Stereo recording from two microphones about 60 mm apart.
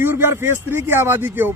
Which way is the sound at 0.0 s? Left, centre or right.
Right.